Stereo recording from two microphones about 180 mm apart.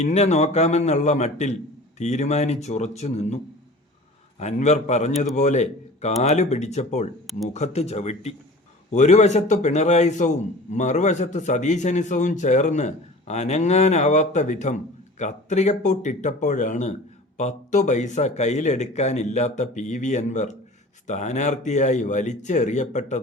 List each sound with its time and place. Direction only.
0.0 s a man's voice: 40° left (ahead or behind)